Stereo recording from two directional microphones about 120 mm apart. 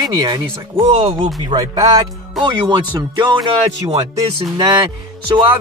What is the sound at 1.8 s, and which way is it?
Speech, 30° right (ahead or behind).